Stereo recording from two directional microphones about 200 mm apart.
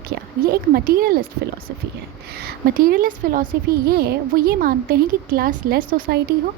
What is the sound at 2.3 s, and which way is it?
A woman's voice, 50° right (ahead or behind).